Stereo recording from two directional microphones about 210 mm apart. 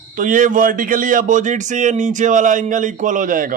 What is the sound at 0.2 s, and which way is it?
Speech, 40° right (ahead or behind).